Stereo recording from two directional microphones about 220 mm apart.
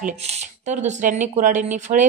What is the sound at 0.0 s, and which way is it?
A woman's voice, 30° right (ahead or behind).